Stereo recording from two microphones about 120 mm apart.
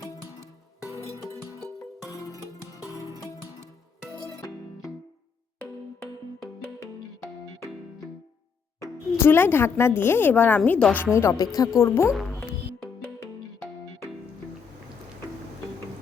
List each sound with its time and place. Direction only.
0.9 s music: 25° right (ahead or behind)
4.4 s music: 25° left (ahead or behind)
8.8 s speech: 20° left (ahead or behind)